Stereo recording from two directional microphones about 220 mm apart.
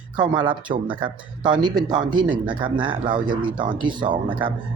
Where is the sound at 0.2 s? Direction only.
25° right (ahead or behind).